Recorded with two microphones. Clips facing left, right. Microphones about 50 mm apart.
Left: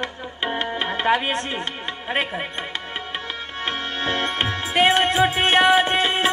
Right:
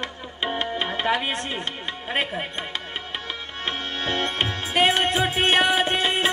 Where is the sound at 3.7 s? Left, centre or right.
Left.